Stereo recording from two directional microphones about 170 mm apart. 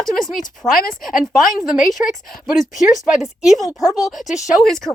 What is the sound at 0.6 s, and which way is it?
Speech, 20° left (ahead or behind).